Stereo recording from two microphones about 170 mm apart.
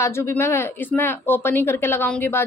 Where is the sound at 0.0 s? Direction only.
15° left (ahead or behind).